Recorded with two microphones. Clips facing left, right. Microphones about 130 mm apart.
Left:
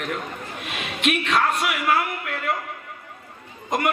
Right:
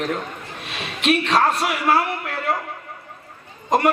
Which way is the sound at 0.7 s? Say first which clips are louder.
Right 4 dB; 35° right (ahead or behind).